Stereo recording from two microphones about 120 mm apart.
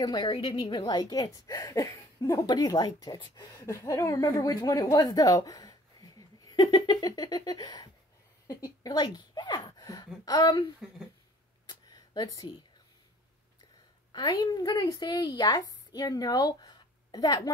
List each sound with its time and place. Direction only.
0.0 s a woman's voice: 30° left (ahead or behind)
0.3 s a woman's voice: 45° left (ahead or behind)
3.5 s a woman's voice: 25° left (ahead or behind)
10.8 s speech: 5° right (ahead or behind)
11.9 s a sound: 35° left (ahead or behind)
14.1 s a woman's voice: 30° left (ahead or behind)